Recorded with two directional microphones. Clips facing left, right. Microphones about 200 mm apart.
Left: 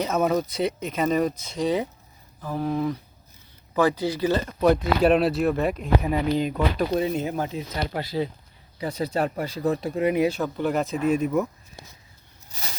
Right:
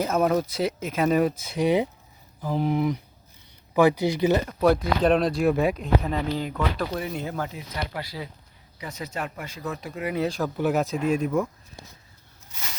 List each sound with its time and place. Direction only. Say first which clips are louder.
0.0 s speech: even; centre (ahead or behind)
4.6 s speech: left 3 dB; centre (ahead or behind); by 10.2 s 30° left (ahead or behind)
10.2 s speech: left 3 dB; 5° left (ahead or behind)
12.5 s a sound: left 2 dB; 35° left (ahead or behind)